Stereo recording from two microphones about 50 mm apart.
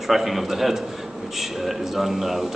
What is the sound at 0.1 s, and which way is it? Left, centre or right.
Speech, centre.